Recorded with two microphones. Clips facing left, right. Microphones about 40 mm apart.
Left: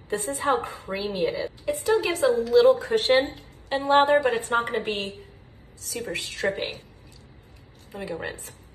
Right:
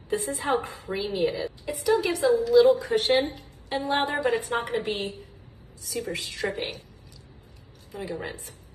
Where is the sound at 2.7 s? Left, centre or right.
Left.